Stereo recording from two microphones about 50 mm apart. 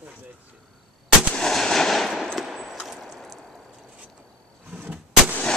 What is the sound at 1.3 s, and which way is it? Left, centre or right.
Fireworks, centre.